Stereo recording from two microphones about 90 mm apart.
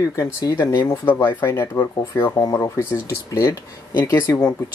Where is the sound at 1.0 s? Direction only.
20° left (ahead or behind).